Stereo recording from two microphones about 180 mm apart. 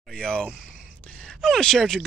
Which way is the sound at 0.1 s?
5° left (ahead or behind).